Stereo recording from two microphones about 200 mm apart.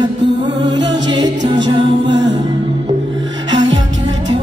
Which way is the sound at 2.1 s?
20° right (ahead or behind).